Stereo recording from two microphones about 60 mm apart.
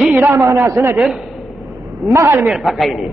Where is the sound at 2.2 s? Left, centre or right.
Right.